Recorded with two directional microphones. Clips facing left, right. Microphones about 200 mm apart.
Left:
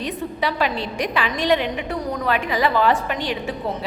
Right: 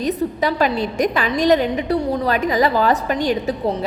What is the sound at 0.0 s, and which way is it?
A woman's voice, 45° right (ahead or behind).